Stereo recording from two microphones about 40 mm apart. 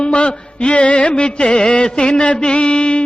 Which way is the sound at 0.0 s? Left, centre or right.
Left.